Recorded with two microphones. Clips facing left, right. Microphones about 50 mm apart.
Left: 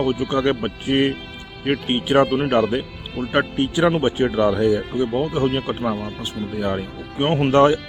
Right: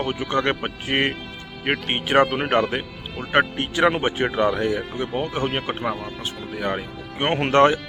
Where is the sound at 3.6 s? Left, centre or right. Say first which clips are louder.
Left 2 dB; right.